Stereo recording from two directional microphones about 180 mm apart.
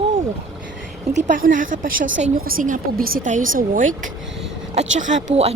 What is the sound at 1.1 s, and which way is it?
A woman's voice, 45° right (ahead or behind).